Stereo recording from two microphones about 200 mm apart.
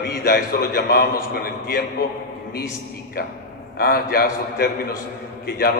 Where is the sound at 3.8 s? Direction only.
50° left (ahead or behind).